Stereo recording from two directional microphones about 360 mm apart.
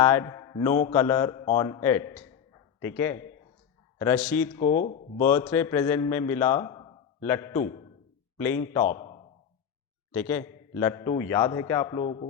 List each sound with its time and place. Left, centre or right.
0.0 s a man's voice: centre
4.6 s speech: centre
5.2 s a man's voice: centre